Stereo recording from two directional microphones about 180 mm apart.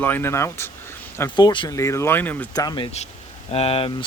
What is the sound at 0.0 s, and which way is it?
Speech, 10° left (ahead or behind).